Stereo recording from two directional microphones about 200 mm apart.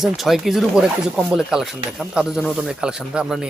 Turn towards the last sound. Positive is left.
turn(degrees=-5)  # may be behind; listen again after turning